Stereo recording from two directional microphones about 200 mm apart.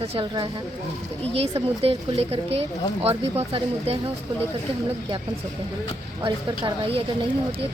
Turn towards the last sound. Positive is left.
turn(degrees=-25)  # may be behind; listen again after turning